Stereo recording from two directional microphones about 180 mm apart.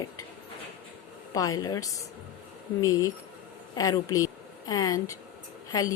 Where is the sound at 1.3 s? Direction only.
20° left (ahead or behind).